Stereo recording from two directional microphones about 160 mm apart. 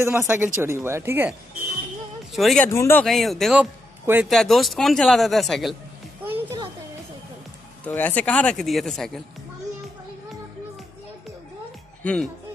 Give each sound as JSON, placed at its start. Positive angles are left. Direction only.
{"t": 0.0, "sound": "speech", "side_deg": -15}
{"t": 2.3, "sound": "speech", "side_deg": 0}
{"t": 2.6, "sound": "speech", "side_deg": 15}
{"t": 3.1, "sound": "speech", "side_deg": 0}
{"t": 4.0, "sound": "speech", "side_deg": -15}
{"t": 4.3, "sound": "speech", "side_deg": 0}
{"t": 6.2, "sound": "music", "side_deg": -15}
{"t": 7.8, "sound": "speech", "side_deg": 10}
{"t": 12.0, "sound": "speech", "side_deg": 5}